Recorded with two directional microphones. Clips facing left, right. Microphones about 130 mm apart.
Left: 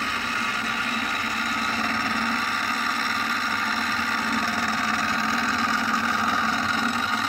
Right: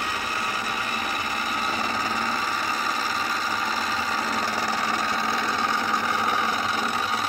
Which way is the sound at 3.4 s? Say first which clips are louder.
Even; 15° right (ahead or behind).